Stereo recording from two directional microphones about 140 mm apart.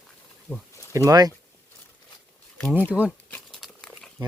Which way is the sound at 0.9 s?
20° right (ahead or behind).